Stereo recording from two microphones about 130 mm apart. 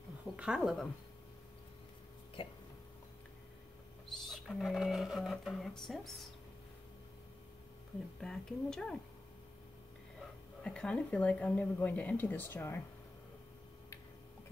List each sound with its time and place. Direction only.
0.4 s speech: 5° right (ahead or behind)
2.4 s hiccup: 45° left (ahead or behind)
4.1 s speech: centre (ahead or behind)
8.2 s speech: 5° left (ahead or behind)
10.6 s speech: 10° left (ahead or behind)